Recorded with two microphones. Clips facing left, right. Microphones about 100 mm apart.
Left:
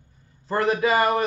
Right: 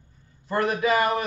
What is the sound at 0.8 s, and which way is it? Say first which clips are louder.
Speech: left 1 dB; 30° left (ahead or behind).